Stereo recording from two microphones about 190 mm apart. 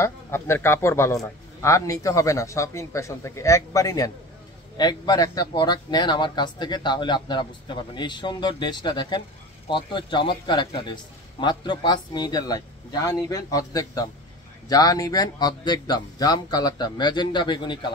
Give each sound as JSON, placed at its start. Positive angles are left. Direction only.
{"t": 0.0, "sound": "a man's voice", "side_deg": 15}